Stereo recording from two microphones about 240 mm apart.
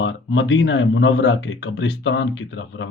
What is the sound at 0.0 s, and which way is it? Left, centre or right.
Speech, left.